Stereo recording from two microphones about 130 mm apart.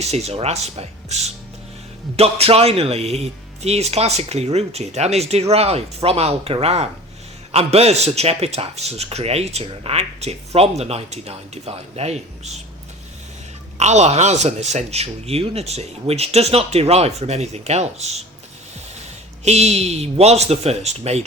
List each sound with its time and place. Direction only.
0.0 s a man's voice: 55° right (ahead or behind)
13.7 s speech: 60° right (ahead or behind)
19.5 s speech: 55° right (ahead or behind)